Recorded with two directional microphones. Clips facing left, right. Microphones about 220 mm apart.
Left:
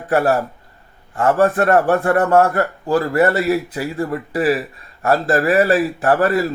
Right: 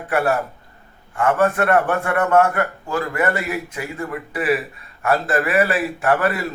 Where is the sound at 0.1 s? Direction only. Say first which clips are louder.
Left 4 dB; 35° left (ahead or behind).